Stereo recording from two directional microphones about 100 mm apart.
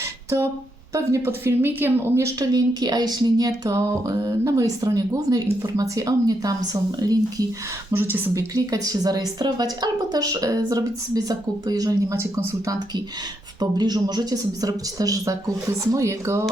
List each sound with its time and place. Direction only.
0.0 s a sound: 30° right (ahead or behind)
0.9 s speech: 25° right (ahead or behind)
2.5 s speech: 40° right (ahead or behind)
3.6 s a woman's voice: 30° right (ahead or behind)
7.9 s speech: 20° right (ahead or behind)
8.5 s a woman's voice: 35° right (ahead or behind)
12.1 s speech: 25° right (ahead or behind)
13.6 s a woman's voice: 45° right (ahead or behind)